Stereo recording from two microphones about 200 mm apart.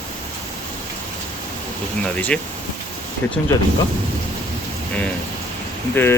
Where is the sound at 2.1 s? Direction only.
5° left (ahead or behind).